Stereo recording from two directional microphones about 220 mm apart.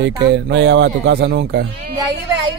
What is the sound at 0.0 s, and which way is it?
Speech, 50° right (ahead or behind).